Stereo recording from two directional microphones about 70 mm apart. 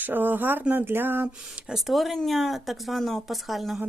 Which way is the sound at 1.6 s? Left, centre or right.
Centre.